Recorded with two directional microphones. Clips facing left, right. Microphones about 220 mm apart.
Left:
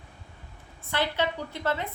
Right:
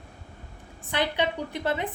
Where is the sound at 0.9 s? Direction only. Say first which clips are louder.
Right 1 dB; 15° right (ahead or behind).